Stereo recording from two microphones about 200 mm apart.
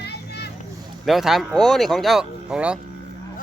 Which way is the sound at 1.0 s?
Centre (ahead or behind).